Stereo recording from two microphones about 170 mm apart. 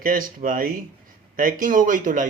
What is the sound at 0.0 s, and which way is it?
A man's voice, 55° right (ahead or behind).